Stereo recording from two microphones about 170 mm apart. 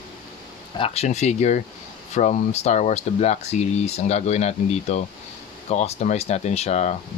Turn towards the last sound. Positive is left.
turn(degrees=40)  # may be behind; listen again after turning